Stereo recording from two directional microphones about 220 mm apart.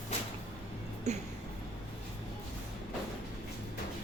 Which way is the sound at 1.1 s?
30° right (ahead or behind).